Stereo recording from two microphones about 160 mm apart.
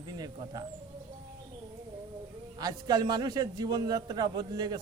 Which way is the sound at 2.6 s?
25° right (ahead or behind).